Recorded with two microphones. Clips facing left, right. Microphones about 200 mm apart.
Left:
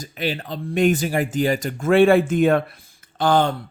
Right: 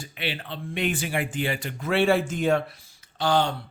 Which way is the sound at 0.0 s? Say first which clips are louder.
Left 7 dB; 40° left (ahead or behind).